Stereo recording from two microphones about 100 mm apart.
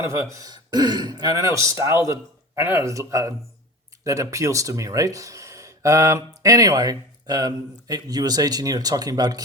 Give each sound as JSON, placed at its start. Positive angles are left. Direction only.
{"t": 0.3, "sound": "speech", "side_deg": -35}